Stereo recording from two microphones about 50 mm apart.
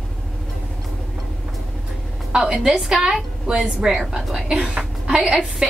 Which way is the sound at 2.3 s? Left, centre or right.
Centre.